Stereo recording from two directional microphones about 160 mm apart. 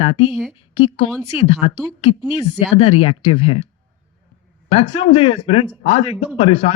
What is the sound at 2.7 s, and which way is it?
Speech, 40° left (ahead or behind).